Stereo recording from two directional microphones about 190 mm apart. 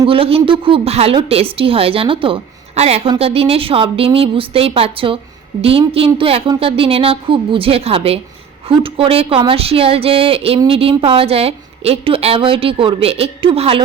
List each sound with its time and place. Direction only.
0.0 s a woman's voice: 30° right (ahead or behind)